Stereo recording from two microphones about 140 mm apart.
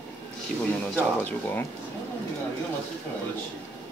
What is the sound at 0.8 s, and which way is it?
Speech, 10° left (ahead or behind).